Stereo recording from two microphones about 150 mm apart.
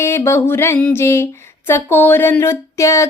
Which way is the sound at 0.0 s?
20° left (ahead or behind).